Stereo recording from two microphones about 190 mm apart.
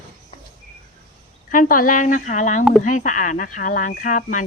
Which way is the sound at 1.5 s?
45° left (ahead or behind).